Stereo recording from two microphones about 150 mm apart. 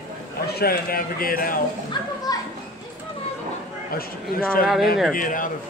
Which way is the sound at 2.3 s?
25° left (ahead or behind).